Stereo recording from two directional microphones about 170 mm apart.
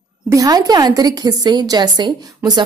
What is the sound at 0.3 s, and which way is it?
A woman's voice, 20° right (ahead or behind).